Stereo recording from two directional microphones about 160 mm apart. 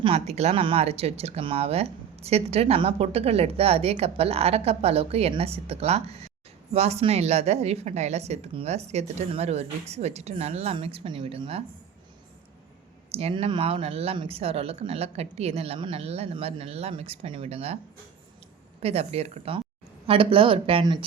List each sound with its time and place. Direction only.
0.0 s speech: 40° right (ahead or behind)
13.1 s speech: 40° right (ahead or behind)
18.8 s speech: 40° right (ahead or behind)